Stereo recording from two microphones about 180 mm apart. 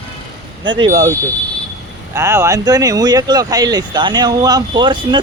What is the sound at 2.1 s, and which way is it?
Speech, 15° right (ahead or behind).